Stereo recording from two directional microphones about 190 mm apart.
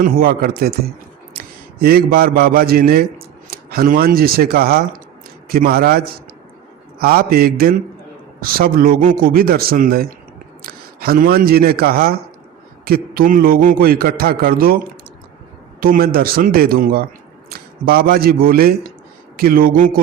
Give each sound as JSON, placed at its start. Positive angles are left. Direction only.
{"t": 0.0, "sound": "a man's voice", "side_deg": -50}
{"t": 15.8, "sound": "a man's voice", "side_deg": -50}